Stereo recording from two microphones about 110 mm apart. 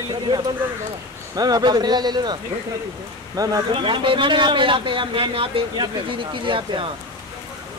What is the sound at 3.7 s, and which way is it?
A man's voice, 50° right (ahead or behind).